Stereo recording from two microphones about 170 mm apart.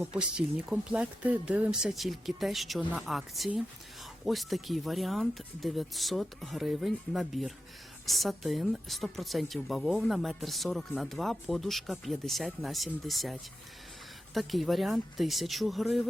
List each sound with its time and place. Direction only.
0.0 s a woman's voice: 5° right (ahead or behind)